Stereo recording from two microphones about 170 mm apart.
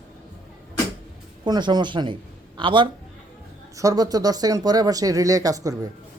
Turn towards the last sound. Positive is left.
turn(degrees=-20)  # may be behind; listen again after turning